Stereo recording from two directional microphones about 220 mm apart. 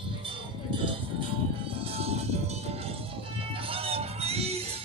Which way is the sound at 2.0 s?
30° right (ahead or behind).